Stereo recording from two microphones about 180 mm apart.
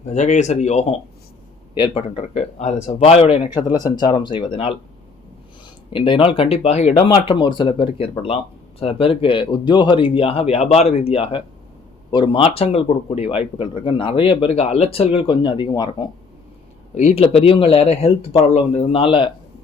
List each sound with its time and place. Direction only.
0.0 s speech: 40° left (ahead or behind)
3.8 s speech: 20° left (ahead or behind)
5.9 s speech: 25° left (ahead or behind)
7.1 s speech: 25° left (ahead or behind)
16.9 s speech: 40° left (ahead or behind)